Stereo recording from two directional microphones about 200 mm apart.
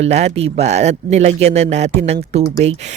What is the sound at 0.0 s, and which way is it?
Speech, 35° right (ahead or behind).